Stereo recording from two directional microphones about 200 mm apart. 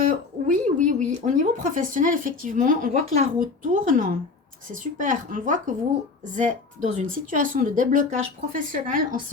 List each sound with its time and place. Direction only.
0.0 s speech: 40° right (ahead or behind)